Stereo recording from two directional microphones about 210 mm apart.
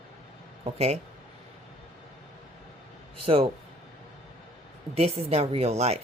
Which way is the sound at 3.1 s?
25° right (ahead or behind).